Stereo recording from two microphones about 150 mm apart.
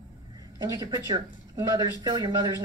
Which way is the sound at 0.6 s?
25° right (ahead or behind).